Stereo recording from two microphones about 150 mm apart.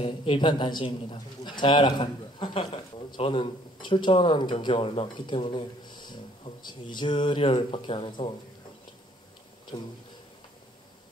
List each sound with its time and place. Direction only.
0.0 s a man's voice: 40° left (ahead or behind)
9.7 s speech: 25° left (ahead or behind)